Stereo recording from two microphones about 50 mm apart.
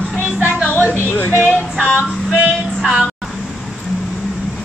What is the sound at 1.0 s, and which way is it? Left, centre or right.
Speech, left.